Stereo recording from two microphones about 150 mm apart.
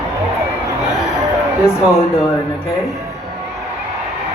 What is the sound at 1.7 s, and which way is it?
Speech, 20° left (ahead or behind).